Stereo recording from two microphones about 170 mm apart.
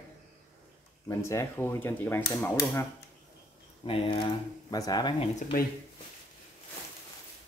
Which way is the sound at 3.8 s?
30° left (ahead or behind).